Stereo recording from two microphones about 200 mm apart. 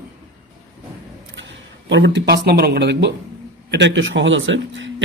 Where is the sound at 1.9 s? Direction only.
60° right (ahead or behind).